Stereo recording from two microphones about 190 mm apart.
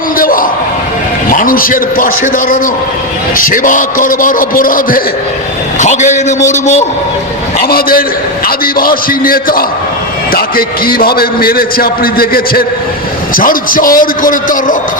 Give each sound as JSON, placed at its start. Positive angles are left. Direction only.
{"t": 0.2, "sound": "a sound", "side_deg": 50}
{"t": 1.3, "sound": "a man's voice", "side_deg": 45}
{"t": 7.6, "sound": "a man's voice", "side_deg": 50}